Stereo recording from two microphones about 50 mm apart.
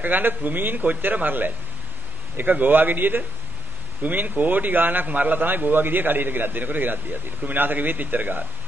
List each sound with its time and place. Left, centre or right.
0.0 s a man's voice: right